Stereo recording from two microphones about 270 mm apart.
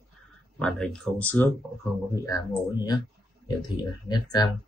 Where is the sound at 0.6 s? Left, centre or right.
Centre.